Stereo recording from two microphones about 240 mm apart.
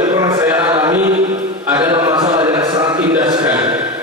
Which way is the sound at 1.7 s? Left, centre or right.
Centre.